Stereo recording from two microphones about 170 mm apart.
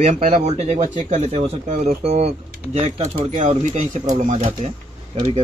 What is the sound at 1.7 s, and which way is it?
Speech, 50° right (ahead or behind).